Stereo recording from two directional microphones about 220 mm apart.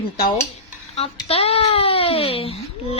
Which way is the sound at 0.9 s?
25° left (ahead or behind).